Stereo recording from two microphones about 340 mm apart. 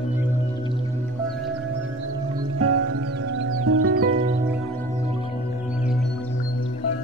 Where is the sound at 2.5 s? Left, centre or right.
Right.